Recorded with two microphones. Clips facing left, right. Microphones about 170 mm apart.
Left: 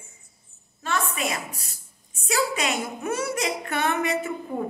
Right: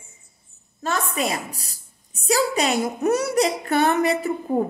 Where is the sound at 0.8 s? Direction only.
40° right (ahead or behind).